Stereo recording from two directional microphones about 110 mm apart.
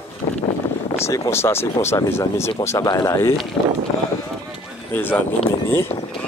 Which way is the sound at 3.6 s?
25° left (ahead or behind).